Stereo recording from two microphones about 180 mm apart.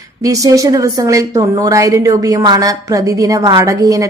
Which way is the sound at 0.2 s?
20° right (ahead or behind).